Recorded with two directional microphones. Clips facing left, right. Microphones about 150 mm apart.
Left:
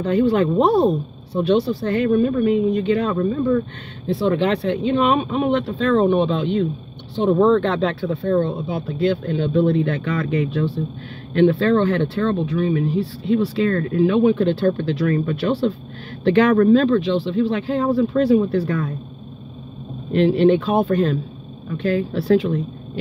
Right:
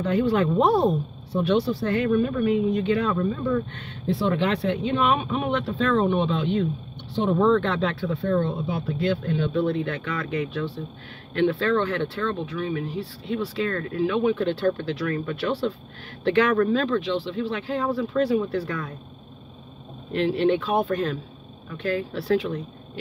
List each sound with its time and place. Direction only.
0.0 s speech: 25° left (ahead or behind)
20.1 s speech: 30° left (ahead or behind)